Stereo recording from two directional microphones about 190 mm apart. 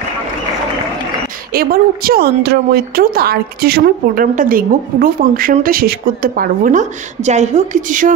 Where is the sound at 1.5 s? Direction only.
50° right (ahead or behind).